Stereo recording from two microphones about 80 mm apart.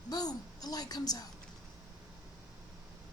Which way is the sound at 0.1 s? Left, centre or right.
Left.